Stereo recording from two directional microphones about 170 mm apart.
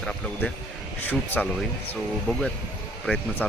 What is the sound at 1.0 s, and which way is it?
Speech, 10° left (ahead or behind).